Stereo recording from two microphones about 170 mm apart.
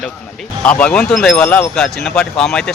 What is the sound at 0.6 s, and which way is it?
Speech, 10° left (ahead or behind).